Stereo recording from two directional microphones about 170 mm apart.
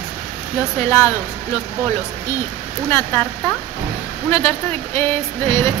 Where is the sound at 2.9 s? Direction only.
15° left (ahead or behind).